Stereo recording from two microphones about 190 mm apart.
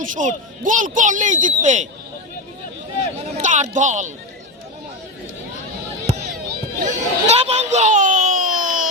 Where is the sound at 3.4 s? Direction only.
40° right (ahead or behind).